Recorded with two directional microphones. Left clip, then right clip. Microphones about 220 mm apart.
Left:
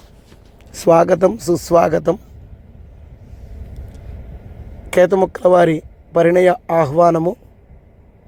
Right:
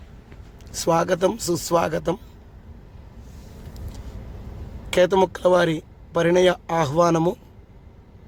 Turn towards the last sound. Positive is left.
turn(degrees=-5)  # may be behind; listen again after turning